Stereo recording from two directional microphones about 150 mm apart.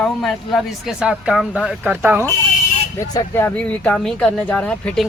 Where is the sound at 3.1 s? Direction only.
20° left (ahead or behind).